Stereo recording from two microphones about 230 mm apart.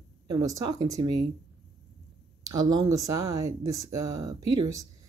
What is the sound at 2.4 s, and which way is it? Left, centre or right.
Speech, centre.